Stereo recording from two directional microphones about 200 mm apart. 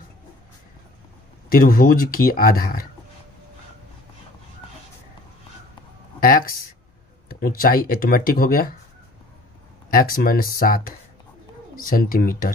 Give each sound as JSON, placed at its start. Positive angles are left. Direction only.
{"t": 1.5, "sound": "speech", "side_deg": 45}
{"t": 6.1, "sound": "a sound", "side_deg": 45}
{"t": 7.2, "sound": "speech", "side_deg": 45}
{"t": 9.8, "sound": "speech", "side_deg": 45}